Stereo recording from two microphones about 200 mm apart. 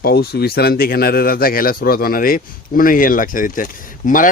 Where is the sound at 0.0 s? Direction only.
50° left (ahead or behind).